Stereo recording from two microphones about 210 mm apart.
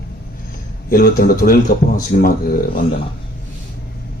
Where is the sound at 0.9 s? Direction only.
45° left (ahead or behind).